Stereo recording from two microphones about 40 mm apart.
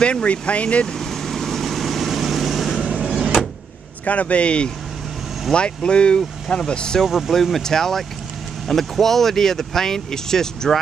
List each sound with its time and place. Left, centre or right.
0.0 s speech: left
0.9 s vehicle: centre
4.0 s speech: left
7.0 s speech: centre
7.6 s speech: centre